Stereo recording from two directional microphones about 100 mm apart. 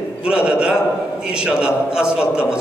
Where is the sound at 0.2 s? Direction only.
10° right (ahead or behind).